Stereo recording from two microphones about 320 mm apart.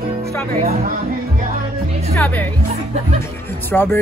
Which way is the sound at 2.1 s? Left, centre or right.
Centre.